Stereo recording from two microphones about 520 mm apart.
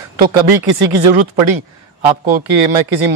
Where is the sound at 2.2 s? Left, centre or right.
Right.